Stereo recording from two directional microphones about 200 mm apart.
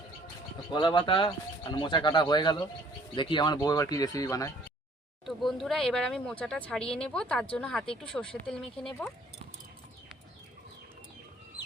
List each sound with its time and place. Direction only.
0.7 s speech: 25° left (ahead or behind)
5.2 s speech: centre (ahead or behind)